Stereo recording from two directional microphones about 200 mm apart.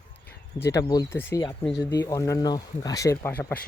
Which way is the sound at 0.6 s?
15° left (ahead or behind).